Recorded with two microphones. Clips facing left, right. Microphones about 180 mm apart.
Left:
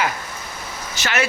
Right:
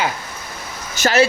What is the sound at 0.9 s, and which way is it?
Speech, 45° right (ahead or behind).